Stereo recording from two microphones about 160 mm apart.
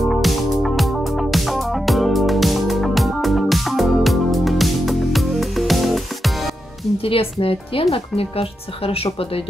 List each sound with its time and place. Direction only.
0.0 s music: centre (ahead or behind)
7.0 s speech: 35° left (ahead or behind)